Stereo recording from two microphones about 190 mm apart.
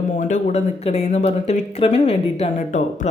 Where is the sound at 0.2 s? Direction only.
40° left (ahead or behind).